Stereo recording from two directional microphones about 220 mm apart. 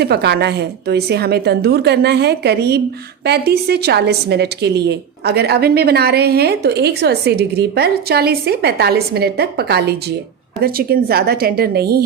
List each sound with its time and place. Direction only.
0.0 s a woman's voice: 50° right (ahead or behind)